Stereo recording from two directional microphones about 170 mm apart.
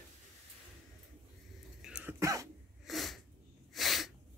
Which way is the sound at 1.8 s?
5° right (ahead or behind).